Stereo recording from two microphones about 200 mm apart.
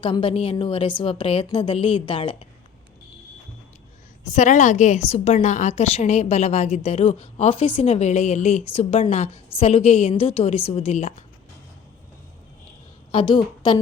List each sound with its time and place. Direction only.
0.0 s a woman's voice: 25° left (ahead or behind)
4.4 s a woman's voice: 35° left (ahead or behind)
13.1 s a woman's voice: 25° left (ahead or behind)